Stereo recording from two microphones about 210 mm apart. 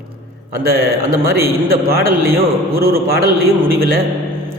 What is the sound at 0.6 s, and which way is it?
A man's voice, 45° right (ahead or behind).